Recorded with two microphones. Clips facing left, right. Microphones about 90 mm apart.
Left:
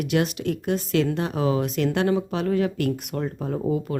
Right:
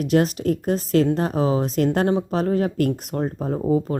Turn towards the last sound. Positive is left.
turn(degrees=-35)  # may be behind; listen again after turning